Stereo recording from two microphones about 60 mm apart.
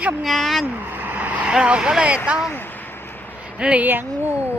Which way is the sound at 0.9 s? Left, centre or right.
Right.